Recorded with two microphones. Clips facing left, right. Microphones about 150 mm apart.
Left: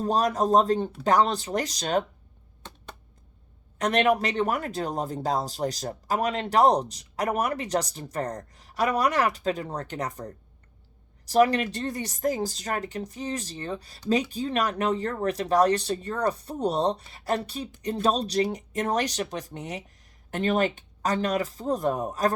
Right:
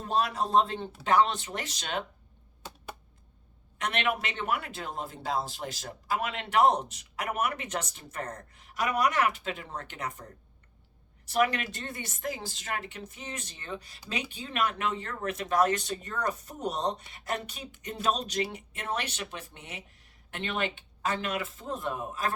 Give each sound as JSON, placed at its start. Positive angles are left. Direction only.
{"t": 0.0, "sound": "speech", "side_deg": 40}
{"t": 3.8, "sound": "speech", "side_deg": 40}